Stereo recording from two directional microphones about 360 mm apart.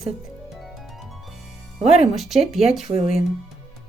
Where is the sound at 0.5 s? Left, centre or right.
Centre.